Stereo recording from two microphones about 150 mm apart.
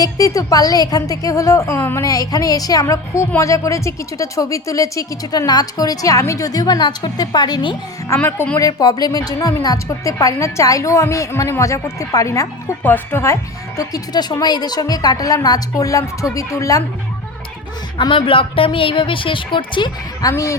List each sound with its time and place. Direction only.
0.0 s a woman's voice: 20° left (ahead or behind)
8.0 s a woman's voice: 15° left (ahead or behind)
17.9 s a woman's voice: 35° left (ahead or behind)
20.3 s a woman's voice: 20° left (ahead or behind)